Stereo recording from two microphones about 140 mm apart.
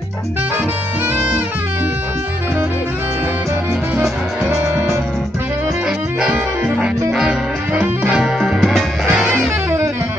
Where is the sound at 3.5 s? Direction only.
15° right (ahead or behind).